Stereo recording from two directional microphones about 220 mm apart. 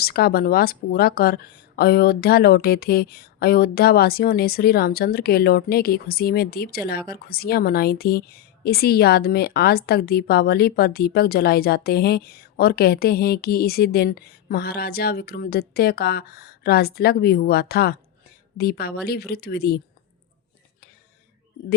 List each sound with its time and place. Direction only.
0.0 s a woman's voice: 45° left (ahead or behind)